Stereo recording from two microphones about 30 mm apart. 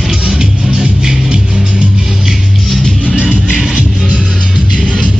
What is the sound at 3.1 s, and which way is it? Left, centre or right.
Music, right.